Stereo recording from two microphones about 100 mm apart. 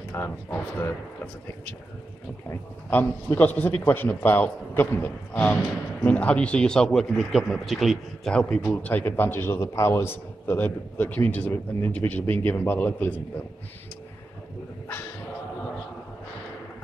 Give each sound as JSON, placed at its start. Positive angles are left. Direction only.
{"t": 0.1, "sound": "a man's voice", "side_deg": 20}
{"t": 2.9, "sound": "a man's voice", "side_deg": 20}
{"t": 8.7, "sound": "a man's voice", "side_deg": 20}